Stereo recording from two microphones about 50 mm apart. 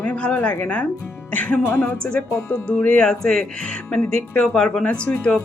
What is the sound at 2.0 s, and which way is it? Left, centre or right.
Speech, left.